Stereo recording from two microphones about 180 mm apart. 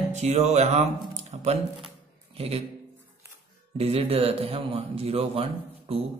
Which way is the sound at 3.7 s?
35° right (ahead or behind).